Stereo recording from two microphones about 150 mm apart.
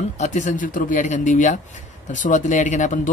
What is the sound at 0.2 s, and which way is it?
Speech, 50° left (ahead or behind).